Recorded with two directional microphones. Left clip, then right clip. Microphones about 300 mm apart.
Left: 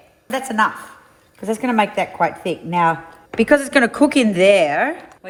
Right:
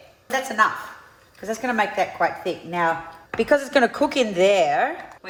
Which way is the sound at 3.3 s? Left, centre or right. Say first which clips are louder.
Left 4 dB; centre.